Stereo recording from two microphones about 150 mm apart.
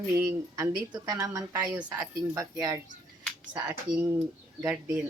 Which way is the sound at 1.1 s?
20° right (ahead or behind).